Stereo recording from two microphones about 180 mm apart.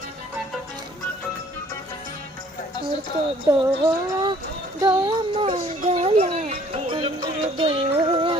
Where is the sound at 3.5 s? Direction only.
15° right (ahead or behind).